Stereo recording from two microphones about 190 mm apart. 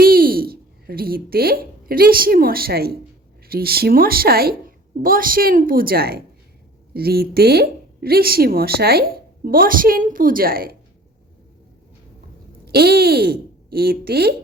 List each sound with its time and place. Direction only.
0.0 s a woman's voice: 50° right (ahead or behind)
12.6 s speech: 55° right (ahead or behind)